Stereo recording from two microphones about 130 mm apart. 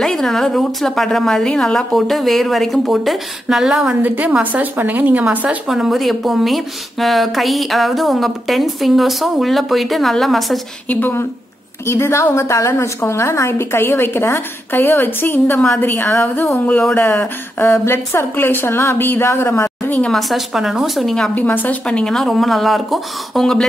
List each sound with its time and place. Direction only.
0.0 s a woman's voice: 5° left (ahead or behind)
5.7 s a woman's voice: centre (ahead or behind)
10.9 s a woman's voice: 15° left (ahead or behind)
20.1 s a woman's voice: centre (ahead or behind)